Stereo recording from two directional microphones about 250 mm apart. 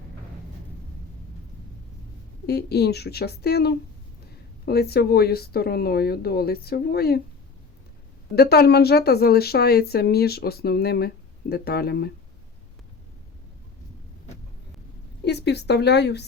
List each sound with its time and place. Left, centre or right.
2.5 s a woman's voice: left
8.4 s a woman's voice: left
15.2 s a woman's voice: left